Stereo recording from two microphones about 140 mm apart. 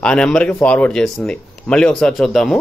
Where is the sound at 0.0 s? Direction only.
5° left (ahead or behind).